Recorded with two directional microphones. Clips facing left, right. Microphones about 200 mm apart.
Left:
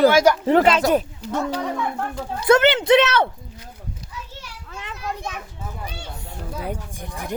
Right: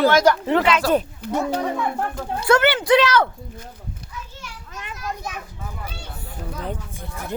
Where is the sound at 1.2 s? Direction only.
60° right (ahead or behind).